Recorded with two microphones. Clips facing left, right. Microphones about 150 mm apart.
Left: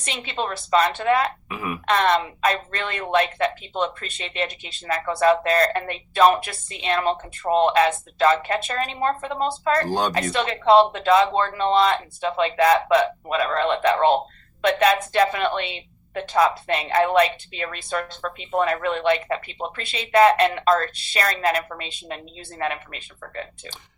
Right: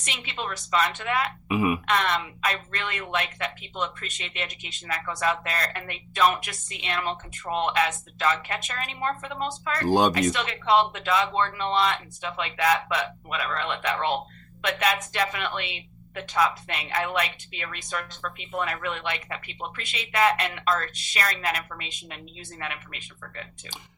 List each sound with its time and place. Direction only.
0.0 s a woman's voice: 35° left (ahead or behind)
1.5 s speech: 15° right (ahead or behind)
1.9 s a woman's voice: 35° left (ahead or behind)